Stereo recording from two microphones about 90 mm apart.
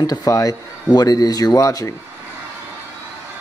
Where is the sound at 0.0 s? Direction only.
50° left (ahead or behind).